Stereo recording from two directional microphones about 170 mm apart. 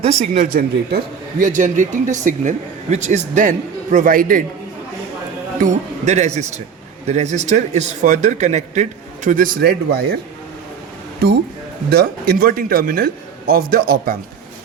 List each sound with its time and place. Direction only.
0.0 s a man's voice: 40° right (ahead or behind)
0.4 s speech: 65° right (ahead or behind)
5.5 s a man's voice: 45° right (ahead or behind); by 10.2 s 65° right (ahead or behind)
11.9 s speech: 60° right (ahead or behind)